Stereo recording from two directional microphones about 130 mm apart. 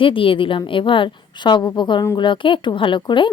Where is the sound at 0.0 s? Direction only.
40° left (ahead or behind).